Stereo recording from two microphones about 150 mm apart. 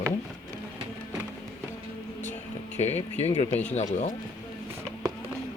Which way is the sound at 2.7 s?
45° left (ahead or behind).